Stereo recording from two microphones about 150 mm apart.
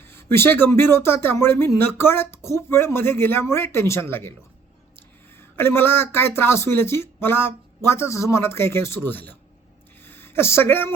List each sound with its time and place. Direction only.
0.0 s speech: 15° left (ahead or behind)
5.4 s speech: 15° left (ahead or behind)
10.0 s a sound: 15° left (ahead or behind)